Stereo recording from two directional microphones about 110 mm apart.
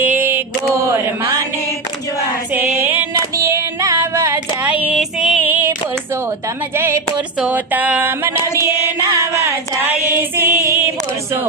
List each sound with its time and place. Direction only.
0.0 s a sound: 20° right (ahead or behind)
2.5 s female singing: 15° right (ahead or behind)
3.3 s female singing: 25° right (ahead or behind)
4.6 s female singing: 10° right (ahead or behind)
5.4 s female singing: 20° right (ahead or behind)
6.7 s speech: 25° right (ahead or behind)
7.3 s a sound: 10° right (ahead or behind)
8.5 s music: 25° right (ahead or behind)
9.8 s female singing: 15° right (ahead or behind)